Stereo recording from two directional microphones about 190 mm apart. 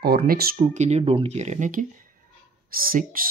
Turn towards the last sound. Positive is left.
turn(degrees=-50)  # may be behind; listen again after turning